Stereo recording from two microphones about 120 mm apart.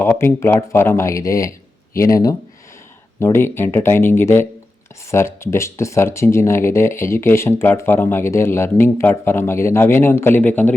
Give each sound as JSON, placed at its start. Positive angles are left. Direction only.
{"t": 0.0, "sound": "speech", "side_deg": 15}